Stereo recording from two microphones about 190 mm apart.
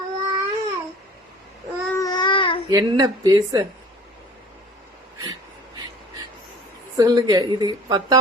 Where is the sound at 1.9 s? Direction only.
20° left (ahead or behind).